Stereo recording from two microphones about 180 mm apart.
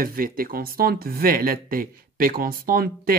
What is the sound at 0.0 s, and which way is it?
Speech, 55° right (ahead or behind).